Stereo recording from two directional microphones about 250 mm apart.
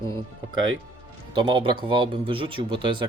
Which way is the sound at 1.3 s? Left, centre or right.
Centre.